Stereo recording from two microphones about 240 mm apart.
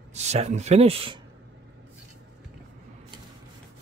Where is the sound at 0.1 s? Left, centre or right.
Right.